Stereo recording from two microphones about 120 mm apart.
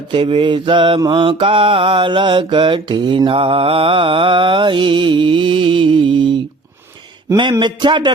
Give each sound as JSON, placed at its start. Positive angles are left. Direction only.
{"t": 0.1, "sound": "mantra", "side_deg": -45}
{"t": 7.6, "sound": "a man's voice", "side_deg": -40}